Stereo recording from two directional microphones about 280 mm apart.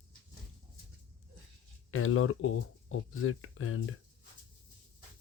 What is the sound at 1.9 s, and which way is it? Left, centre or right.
Speech, left.